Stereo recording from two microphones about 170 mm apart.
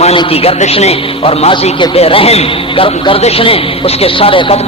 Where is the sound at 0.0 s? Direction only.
35° left (ahead or behind).